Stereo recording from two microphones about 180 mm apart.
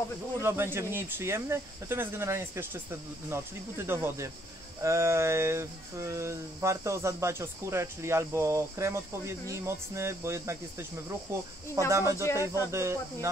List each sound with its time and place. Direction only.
0.4 s speech: 15° right (ahead or behind)